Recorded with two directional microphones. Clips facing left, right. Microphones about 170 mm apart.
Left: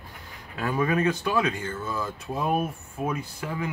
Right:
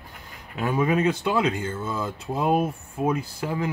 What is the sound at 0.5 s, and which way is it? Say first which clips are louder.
Speech: right 2 dB; 20° right (ahead or behind).